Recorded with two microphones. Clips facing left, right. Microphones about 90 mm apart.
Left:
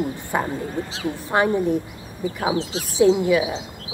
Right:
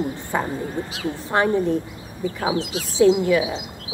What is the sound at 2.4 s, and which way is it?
Speech, 25° left (ahead or behind).